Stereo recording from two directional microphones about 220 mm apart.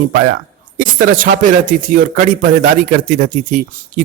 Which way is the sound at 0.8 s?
40° right (ahead or behind).